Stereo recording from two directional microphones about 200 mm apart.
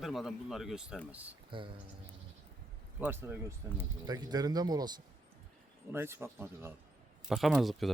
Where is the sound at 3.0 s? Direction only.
10° right (ahead or behind).